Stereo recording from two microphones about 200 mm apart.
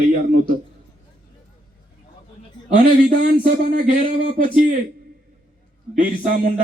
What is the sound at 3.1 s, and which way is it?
Speech, 45° right (ahead or behind).